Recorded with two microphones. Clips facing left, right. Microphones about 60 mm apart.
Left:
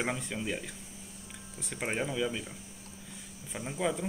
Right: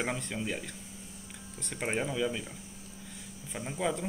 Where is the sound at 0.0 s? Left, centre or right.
Centre.